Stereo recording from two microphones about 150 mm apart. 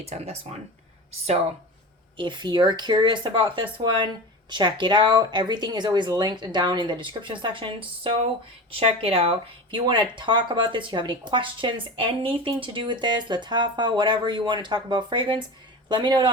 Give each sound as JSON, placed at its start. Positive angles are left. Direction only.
{"t": 0.0, "sound": "speech", "side_deg": -45}
{"t": 2.1, "sound": "speech", "side_deg": -30}